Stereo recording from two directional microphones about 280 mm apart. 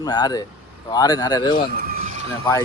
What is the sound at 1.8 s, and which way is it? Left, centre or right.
Vehicle, right.